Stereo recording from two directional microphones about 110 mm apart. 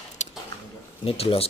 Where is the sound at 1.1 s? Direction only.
60° left (ahead or behind).